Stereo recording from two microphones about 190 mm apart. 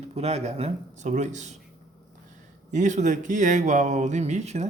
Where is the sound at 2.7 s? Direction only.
40° right (ahead or behind).